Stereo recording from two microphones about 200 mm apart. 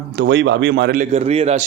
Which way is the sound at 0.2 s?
60° right (ahead or behind).